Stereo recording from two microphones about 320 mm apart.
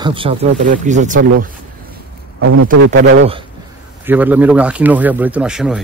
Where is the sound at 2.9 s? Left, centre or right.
Right.